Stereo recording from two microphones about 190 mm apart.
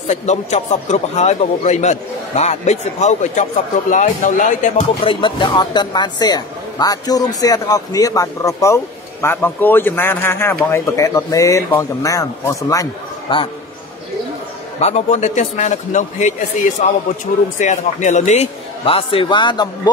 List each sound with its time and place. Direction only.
0.1 s a man's voice: 35° left (ahead or behind)
5.0 s a man's voice: 25° left (ahead or behind)
14.8 s a man's voice: 35° left (ahead or behind)